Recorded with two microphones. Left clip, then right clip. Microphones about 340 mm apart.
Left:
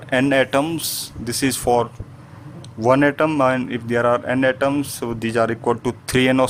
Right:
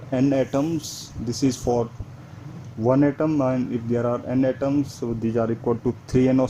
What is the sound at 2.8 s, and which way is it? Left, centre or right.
Speech, left.